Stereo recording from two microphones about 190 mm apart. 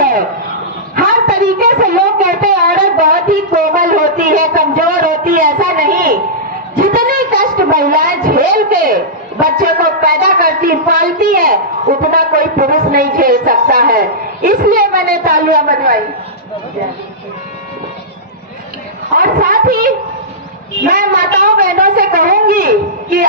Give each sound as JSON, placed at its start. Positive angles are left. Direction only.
{"t": 0.0, "sound": "a sound", "side_deg": -50}
{"t": 9.4, "sound": "speech", "side_deg": -50}
{"t": 19.1, "sound": "speech", "side_deg": -50}